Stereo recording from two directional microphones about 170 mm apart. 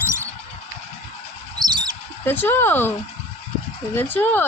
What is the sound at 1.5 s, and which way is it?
Bird, 25° right (ahead or behind).